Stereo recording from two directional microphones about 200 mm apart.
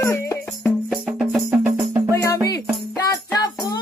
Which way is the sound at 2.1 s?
15° left (ahead or behind).